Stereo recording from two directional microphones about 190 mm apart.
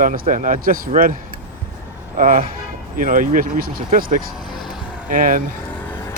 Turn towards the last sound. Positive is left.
turn(degrees=-45)  # may be behind; listen again after turning